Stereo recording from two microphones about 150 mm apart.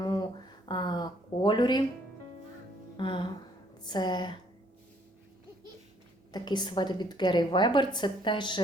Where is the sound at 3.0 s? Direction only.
35° left (ahead or behind).